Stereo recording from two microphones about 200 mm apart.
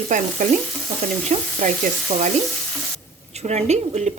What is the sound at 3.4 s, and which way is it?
Speech, 35° right (ahead or behind).